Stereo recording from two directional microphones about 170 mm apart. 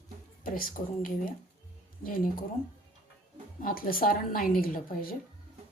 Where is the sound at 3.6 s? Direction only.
55° left (ahead or behind).